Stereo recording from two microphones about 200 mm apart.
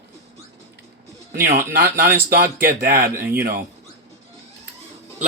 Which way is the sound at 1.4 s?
45° right (ahead or behind).